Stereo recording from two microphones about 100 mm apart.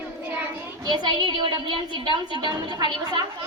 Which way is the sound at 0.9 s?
50° right (ahead or behind).